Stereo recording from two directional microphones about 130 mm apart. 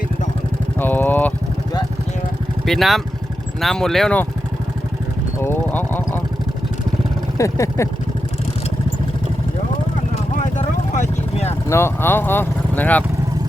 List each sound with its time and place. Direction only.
0.8 s vehicle: 15° left (ahead or behind)
2.6 s speech: centre (ahead or behind)
5.4 s a sound: 15° left (ahead or behind)
7.3 s speech: 25° left (ahead or behind)
10.9 s vehicle: 60° left (ahead or behind)
11.7 s speech: 20° left (ahead or behind)